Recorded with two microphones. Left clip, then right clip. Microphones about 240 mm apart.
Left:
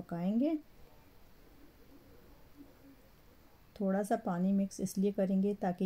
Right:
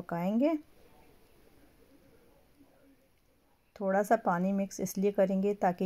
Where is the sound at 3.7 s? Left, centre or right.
Centre.